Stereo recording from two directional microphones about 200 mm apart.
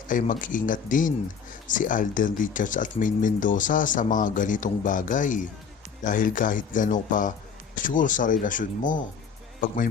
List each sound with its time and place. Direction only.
0.1 s speech: 40° left (ahead or behind)